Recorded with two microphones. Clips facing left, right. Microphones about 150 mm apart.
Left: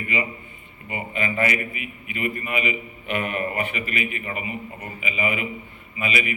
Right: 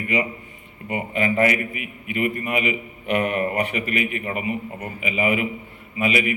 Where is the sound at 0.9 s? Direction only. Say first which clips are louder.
Right 5 dB; 60° right (ahead or behind).